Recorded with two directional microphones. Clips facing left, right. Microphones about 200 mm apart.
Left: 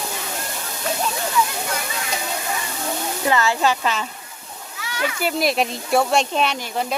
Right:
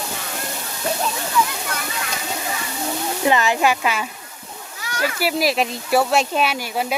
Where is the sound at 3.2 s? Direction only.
20° right (ahead or behind).